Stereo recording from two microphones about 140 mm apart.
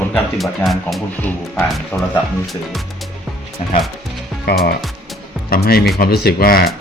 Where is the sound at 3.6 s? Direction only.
65° left (ahead or behind).